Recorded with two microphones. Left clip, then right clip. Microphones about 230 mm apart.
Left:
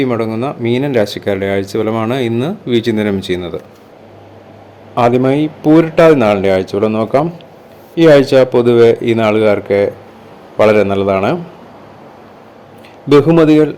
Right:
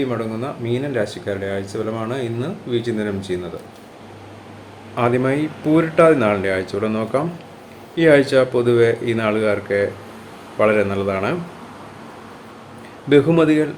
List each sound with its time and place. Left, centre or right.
0.0 s speech: left
4.9 s a man's voice: left
13.1 s speech: left